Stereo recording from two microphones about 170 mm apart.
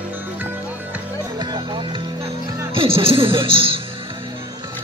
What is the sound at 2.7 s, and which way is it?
Speech, 30° right (ahead or behind).